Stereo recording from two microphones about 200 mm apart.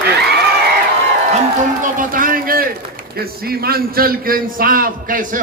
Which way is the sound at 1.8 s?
40° right (ahead or behind).